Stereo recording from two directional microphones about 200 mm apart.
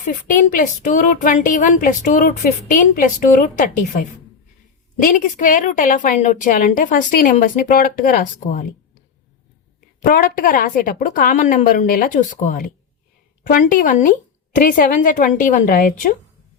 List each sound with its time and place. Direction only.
0.0 s speech: 40° left (ahead or behind)
4.9 s speech: 40° left (ahead or behind)
10.0 s a woman's voice: 45° left (ahead or behind)